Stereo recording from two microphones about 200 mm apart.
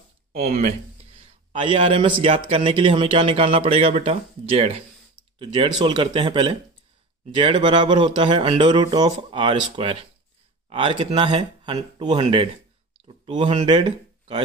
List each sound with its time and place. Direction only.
0.3 s a man's voice: 35° right (ahead or behind)